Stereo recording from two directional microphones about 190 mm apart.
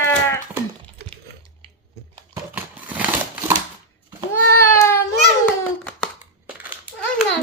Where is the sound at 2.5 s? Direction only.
10° right (ahead or behind).